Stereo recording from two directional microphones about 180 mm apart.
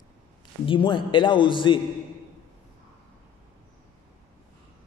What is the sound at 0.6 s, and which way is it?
Speech, 25° left (ahead or behind).